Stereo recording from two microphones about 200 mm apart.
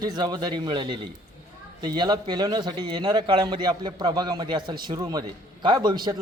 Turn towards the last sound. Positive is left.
turn(degrees=-20)  # may be behind; listen again after turning